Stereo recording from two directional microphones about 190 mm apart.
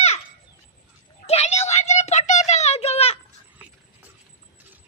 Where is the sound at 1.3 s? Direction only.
35° left (ahead or behind).